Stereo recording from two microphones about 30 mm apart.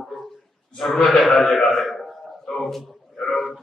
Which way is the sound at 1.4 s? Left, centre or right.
Centre.